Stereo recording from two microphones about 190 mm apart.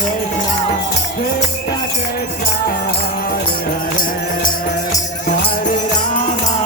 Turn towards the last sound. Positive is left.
turn(degrees=40)  # may be behind; listen again after turning